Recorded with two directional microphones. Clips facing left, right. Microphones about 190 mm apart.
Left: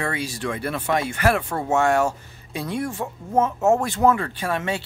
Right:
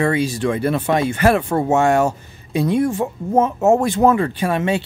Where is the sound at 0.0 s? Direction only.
20° right (ahead or behind).